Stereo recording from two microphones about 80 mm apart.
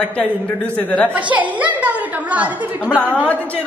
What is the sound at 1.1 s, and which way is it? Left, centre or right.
A woman's voice, centre.